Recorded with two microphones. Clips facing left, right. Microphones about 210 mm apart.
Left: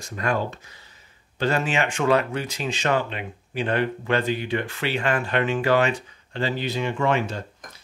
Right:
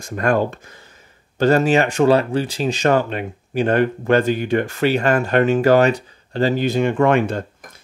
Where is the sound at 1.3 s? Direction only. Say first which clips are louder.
Right 9 dB; 40° right (ahead or behind).